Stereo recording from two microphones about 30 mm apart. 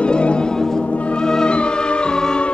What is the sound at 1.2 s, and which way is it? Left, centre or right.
Music, left.